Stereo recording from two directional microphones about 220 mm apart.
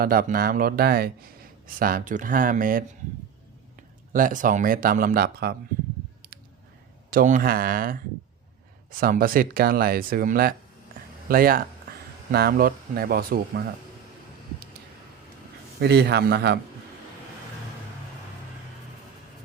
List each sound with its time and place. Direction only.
0.0 s a man's voice: 40° right (ahead or behind)
4.1 s a man's voice: 35° right (ahead or behind)
7.1 s a man's voice: 35° right (ahead or behind)
15.8 s speech: 50° right (ahead or behind)